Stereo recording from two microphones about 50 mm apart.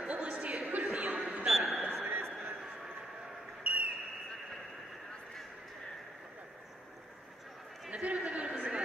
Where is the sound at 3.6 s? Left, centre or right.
Right.